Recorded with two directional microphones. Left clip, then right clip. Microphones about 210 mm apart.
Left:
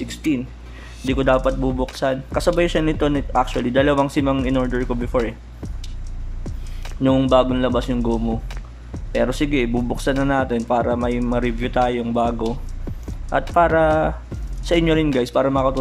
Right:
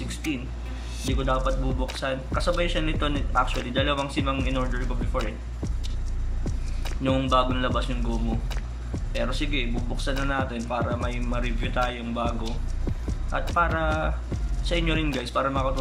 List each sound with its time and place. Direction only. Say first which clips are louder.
1.1 s speech: left 9 dB; 40° left (ahead or behind)
7.0 s a man's voice: left 7 dB; 30° left (ahead or behind)